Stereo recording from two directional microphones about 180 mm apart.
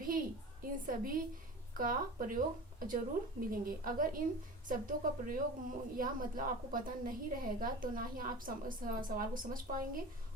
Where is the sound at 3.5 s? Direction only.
50° right (ahead or behind).